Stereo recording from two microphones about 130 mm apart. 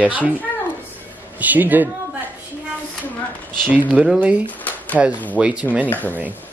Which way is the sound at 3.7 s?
10° right (ahead or behind).